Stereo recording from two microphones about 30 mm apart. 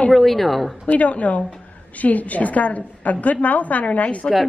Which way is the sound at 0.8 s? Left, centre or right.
Left.